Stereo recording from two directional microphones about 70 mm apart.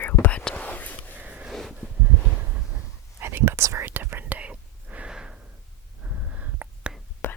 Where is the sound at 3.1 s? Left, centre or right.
Right.